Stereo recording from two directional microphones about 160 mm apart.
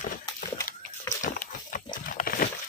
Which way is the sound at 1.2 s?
55° left (ahead or behind).